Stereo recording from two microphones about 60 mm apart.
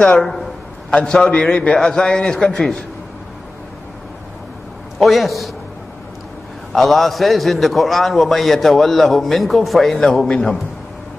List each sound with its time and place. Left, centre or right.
0.2 s a man's voice: centre
0.8 s a man's voice: centre
4.9 s a man's voice: centre
6.7 s a man's voice: centre